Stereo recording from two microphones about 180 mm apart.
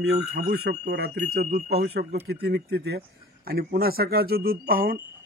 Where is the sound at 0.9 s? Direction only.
60° right (ahead or behind).